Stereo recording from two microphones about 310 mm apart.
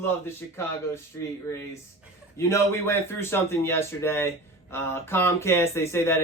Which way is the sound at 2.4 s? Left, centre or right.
Centre.